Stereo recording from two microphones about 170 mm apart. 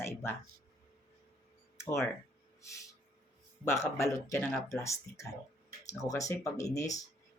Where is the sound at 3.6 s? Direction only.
15° left (ahead or behind).